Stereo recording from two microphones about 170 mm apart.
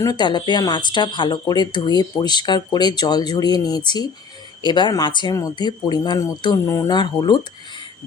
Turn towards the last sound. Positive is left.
turn(degrees=25)  # may be behind; listen again after turning